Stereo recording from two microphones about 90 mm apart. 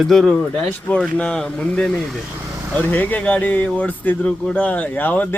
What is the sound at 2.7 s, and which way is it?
Speech, 15° left (ahead or behind).